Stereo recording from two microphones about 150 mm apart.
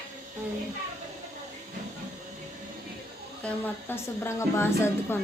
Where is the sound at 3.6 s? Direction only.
15° left (ahead or behind).